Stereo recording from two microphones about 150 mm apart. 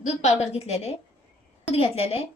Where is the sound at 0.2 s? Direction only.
50° left (ahead or behind).